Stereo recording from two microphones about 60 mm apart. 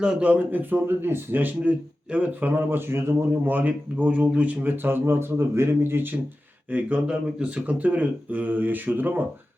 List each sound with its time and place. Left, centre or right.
0.0 s speech: centre; by 3.2 s right
3.4 s speech: right